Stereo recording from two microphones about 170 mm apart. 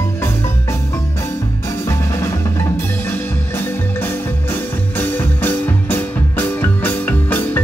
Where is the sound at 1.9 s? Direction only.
15° left (ahead or behind).